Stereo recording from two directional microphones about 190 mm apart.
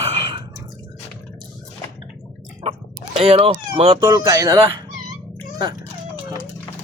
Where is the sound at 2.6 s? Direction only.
35° right (ahead or behind).